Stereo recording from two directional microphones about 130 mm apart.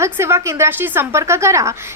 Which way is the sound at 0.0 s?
20° right (ahead or behind).